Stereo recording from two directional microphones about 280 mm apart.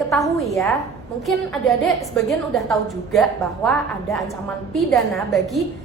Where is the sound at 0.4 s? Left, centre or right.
Centre.